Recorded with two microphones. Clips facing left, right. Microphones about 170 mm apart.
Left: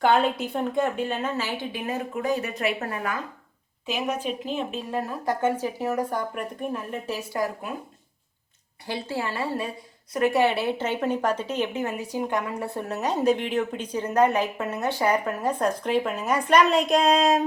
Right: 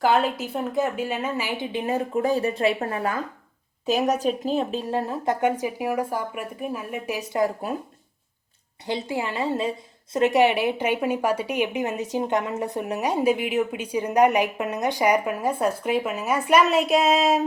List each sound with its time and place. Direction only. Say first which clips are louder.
0.0 s a woman's voice: even; centre (ahead or behind)
1.9 s speech: right 4 dB; 35° right (ahead or behind)
8.9 s a woman's voice: right 2 dB; 20° right (ahead or behind)